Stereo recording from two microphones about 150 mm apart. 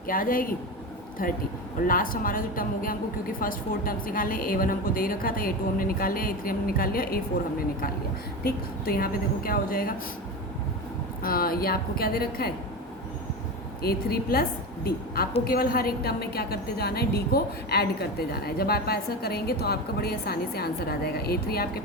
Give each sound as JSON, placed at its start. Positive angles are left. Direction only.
{"t": 0.1, "sound": "a woman's voice", "side_deg": 70}
{"t": 8.4, "sound": "a woman's voice", "side_deg": 85}
{"t": 11.2, "sound": "a woman's voice", "side_deg": 75}
{"t": 13.8, "sound": "a woman's voice", "side_deg": 90}